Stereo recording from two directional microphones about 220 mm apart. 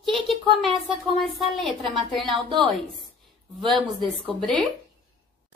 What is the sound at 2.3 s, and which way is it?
Speech, 20° right (ahead or behind).